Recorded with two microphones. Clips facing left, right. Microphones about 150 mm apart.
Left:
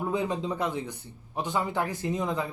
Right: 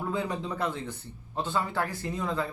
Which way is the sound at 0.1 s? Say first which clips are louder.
Left 3 dB; 20° left (ahead or behind).